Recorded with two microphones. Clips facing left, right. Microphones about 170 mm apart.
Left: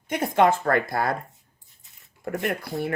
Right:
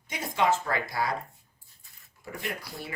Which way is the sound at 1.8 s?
20° left (ahead or behind).